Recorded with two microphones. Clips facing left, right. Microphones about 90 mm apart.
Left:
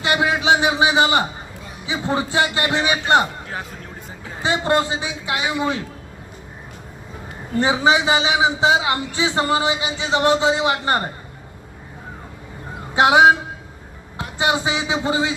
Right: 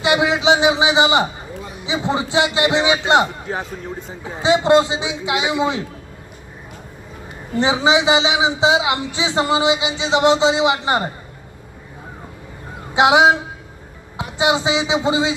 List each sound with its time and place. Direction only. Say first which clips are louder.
0.0 s a sound: right 3 dB; 15° right (ahead or behind)
1.9 s a man's voice: right 2 dB; 20° right (ahead or behind)
7.5 s a man's voice: right 1 dB; 20° right (ahead or behind)
13.0 s a man's voice: even; 15° right (ahead or behind)